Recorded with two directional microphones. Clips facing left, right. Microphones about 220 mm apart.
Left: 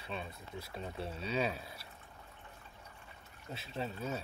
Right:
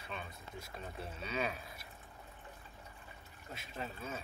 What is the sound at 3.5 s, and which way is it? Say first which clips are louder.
Speech: left 4 dB; 30° left (ahead or behind).